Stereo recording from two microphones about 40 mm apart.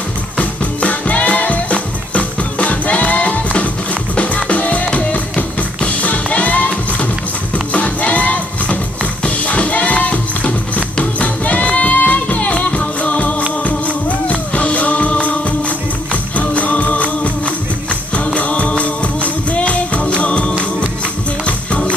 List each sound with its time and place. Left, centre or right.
0.4 s music: left
7.7 s music: left